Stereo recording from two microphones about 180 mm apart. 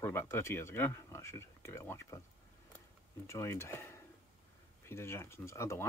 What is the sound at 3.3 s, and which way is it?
Speech, 15° left (ahead or behind).